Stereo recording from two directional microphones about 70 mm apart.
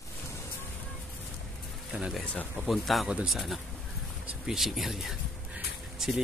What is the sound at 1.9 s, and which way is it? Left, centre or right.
Speech, centre.